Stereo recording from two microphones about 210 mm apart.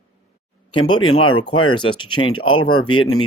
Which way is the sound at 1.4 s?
25° left (ahead or behind).